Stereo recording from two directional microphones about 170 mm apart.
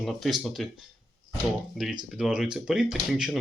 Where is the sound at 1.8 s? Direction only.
Centre (ahead or behind).